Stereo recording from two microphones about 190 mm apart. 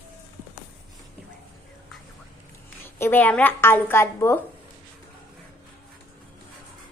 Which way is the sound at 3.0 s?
10° left (ahead or behind).